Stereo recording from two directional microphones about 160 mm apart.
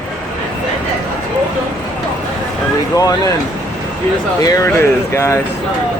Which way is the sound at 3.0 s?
20° left (ahead or behind).